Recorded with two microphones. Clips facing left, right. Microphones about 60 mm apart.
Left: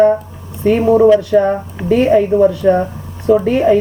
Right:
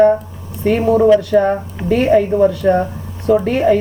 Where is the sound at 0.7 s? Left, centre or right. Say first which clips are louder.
Left 2 dB; centre.